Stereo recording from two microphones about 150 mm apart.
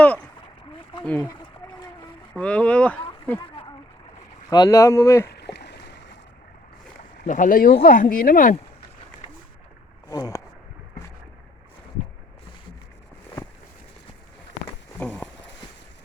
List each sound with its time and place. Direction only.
1.0 s speech: 10° left (ahead or behind)
1.3 s whale vocalization: 30° left (ahead or behind)
2.3 s speech: 10° left (ahead or behind)
4.4 s speech: 25° left (ahead or behind)
5.5 s boat: 90° left
7.3 s speech: 60° left (ahead or behind)
10.1 s speech: 25° left (ahead or behind)
14.9 s a sound: 5° left (ahead or behind)